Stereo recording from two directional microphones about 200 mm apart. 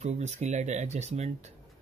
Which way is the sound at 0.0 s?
35° right (ahead or behind).